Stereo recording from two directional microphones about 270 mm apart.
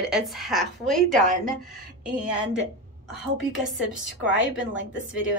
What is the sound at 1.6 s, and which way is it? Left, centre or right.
Speech, centre.